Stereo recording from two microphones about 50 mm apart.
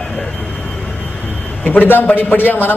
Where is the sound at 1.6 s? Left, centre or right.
Left.